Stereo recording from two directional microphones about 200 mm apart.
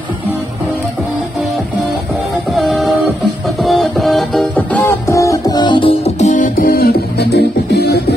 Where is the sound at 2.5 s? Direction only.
Centre (ahead or behind).